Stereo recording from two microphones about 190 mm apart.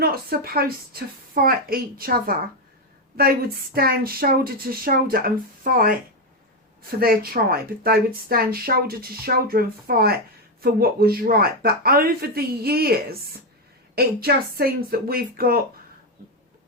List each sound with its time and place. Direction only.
0.0 s speech: 55° right (ahead or behind)
7.0 s speech: 50° right (ahead or behind)